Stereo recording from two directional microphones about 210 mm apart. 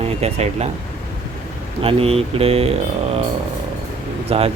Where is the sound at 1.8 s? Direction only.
25° right (ahead or behind).